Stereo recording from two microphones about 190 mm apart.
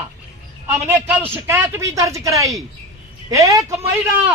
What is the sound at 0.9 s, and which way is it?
Speech, 10° right (ahead or behind).